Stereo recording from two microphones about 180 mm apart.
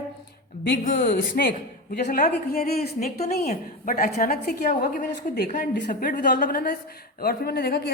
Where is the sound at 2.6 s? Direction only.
60° left (ahead or behind).